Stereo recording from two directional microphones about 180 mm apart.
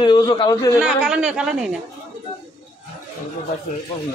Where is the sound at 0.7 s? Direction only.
5° right (ahead or behind).